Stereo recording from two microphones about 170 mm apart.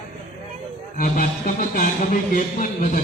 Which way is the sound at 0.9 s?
55° left (ahead or behind).